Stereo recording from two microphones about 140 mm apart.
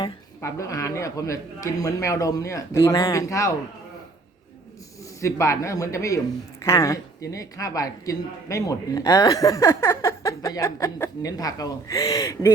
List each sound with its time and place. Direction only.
0.0 s a woman's voice: 20° left (ahead or behind)
5.2 s a woman's voice: 20° left (ahead or behind)